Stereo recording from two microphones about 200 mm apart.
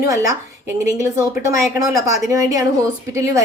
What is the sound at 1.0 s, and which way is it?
A woman's voice, 15° right (ahead or behind).